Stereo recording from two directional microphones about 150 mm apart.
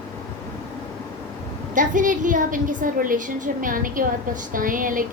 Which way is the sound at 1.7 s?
60° right (ahead or behind).